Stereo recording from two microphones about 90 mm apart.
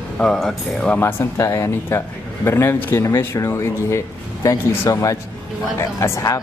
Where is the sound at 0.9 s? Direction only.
30° left (ahead or behind).